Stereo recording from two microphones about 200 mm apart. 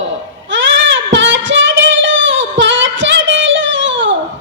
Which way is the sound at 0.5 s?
70° right (ahead or behind).